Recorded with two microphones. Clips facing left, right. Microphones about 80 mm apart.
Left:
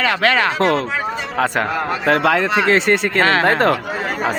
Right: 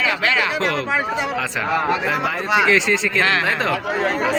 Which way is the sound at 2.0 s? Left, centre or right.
Left.